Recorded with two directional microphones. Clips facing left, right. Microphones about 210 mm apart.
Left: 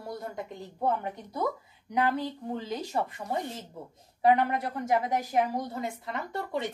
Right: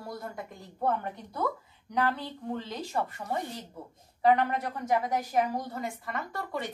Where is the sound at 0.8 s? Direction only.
15° left (ahead or behind).